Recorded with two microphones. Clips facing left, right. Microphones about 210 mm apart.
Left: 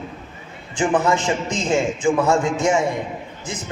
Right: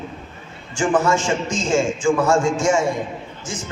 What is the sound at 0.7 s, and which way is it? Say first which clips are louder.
Mantra: even; 20° left (ahead or behind).